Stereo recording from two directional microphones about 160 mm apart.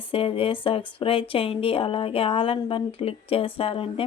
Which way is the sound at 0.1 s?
35° left (ahead or behind).